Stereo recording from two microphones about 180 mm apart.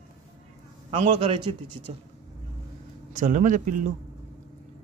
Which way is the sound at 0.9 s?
30° right (ahead or behind).